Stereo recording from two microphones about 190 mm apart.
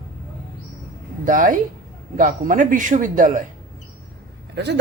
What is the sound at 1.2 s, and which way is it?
A man's voice, 45° right (ahead or behind).